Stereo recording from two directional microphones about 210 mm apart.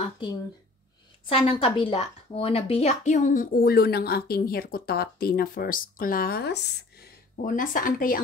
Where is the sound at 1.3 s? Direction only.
25° left (ahead or behind).